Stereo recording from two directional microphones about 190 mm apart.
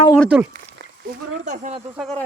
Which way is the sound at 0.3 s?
5° right (ahead or behind).